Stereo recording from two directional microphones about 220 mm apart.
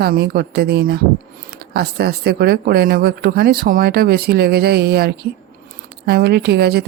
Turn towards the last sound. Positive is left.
turn(degrees=-45)  # may be behind; listen again after turning